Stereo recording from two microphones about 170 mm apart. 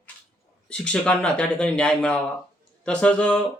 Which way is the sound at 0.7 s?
5° left (ahead or behind).